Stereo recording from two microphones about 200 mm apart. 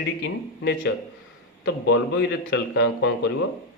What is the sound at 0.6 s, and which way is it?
A man's voice, 55° left (ahead or behind).